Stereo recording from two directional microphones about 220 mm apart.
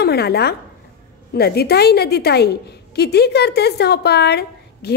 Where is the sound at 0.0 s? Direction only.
45° left (ahead or behind).